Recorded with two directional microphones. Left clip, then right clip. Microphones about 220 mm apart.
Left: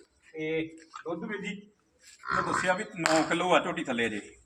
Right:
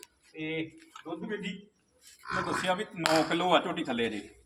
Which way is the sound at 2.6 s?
Centre (ahead or behind).